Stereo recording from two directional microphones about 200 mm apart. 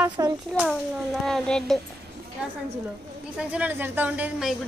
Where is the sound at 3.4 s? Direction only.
5° right (ahead or behind).